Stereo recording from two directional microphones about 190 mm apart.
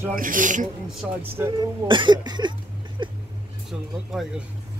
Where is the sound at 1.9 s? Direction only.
25° right (ahead or behind).